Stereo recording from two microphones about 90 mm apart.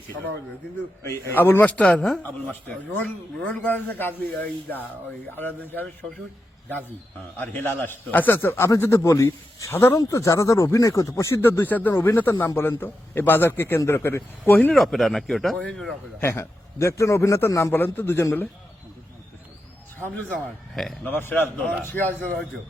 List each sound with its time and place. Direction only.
1.0 s a man's voice: 25° left (ahead or behind)
1.6 s speech: 10° left (ahead or behind)
2.6 s a man's voice: 15° left (ahead or behind)
7.3 s a man's voice: 20° left (ahead or behind)
14.7 s speech: centre (ahead or behind)
16.2 s a man's voice: 30° left (ahead or behind)
20.0 s a man's voice: 20° left (ahead or behind)
21.6 s a man's voice: 15° left (ahead or behind)